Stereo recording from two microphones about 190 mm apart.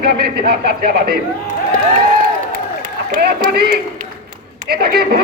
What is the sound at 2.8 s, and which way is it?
Run, 50° right (ahead or behind).